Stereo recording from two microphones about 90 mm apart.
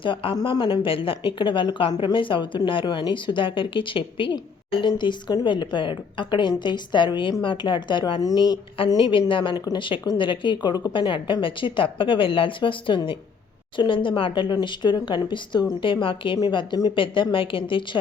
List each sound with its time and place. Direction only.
0.0 s a woman's voice: 80° left; by 8.2 s 60° left (ahead or behind)
8.2 s a woman's voice: 45° left (ahead or behind)
8.9 s speech: 60° left (ahead or behind)
10.9 s a woman's voice: 70° left (ahead or behind)
16.4 s a woman's voice: 55° left (ahead or behind)
16.9 s a woman's voice: 70° left (ahead or behind)